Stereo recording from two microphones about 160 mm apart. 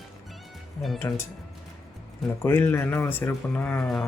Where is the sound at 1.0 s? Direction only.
20° left (ahead or behind).